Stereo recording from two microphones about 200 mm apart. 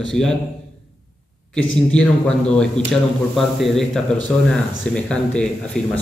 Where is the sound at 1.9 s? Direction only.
5° left (ahead or behind).